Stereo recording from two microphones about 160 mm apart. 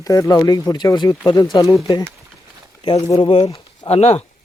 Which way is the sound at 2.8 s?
35° left (ahead or behind).